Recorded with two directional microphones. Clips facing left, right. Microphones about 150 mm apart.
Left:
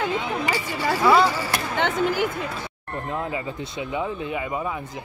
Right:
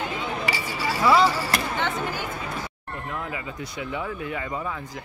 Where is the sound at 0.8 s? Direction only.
55° left (ahead or behind).